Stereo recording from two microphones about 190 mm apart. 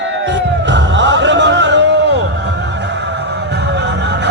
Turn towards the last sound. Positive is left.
turn(degrees=-65)  # may be behind; listen again after turning